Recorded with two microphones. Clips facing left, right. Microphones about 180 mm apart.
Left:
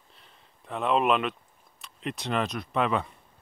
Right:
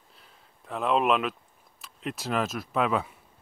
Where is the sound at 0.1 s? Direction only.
Centre (ahead or behind).